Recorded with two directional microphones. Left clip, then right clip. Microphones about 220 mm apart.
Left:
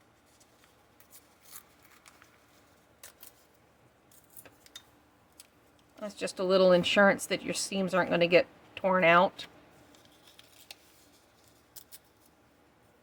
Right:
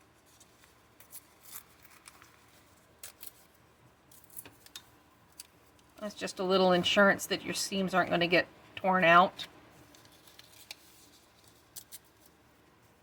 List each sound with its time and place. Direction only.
6.0 s speech: 30° left (ahead or behind)